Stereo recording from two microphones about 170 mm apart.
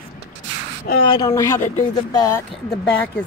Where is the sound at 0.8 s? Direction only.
70° left (ahead or behind).